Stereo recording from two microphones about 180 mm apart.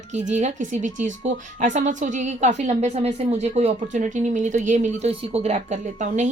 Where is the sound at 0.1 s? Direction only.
40° right (ahead or behind).